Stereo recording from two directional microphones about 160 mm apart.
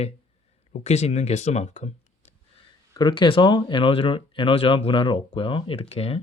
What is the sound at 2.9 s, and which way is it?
Speech, 25° left (ahead or behind).